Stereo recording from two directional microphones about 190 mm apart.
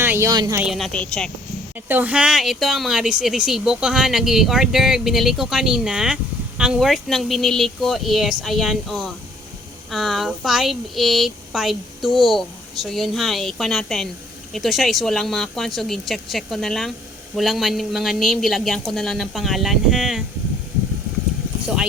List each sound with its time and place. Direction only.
0.0 s speech: 15° right (ahead or behind)
0.6 s speech: centre (ahead or behind)
1.9 s speech: 10° right (ahead or behind)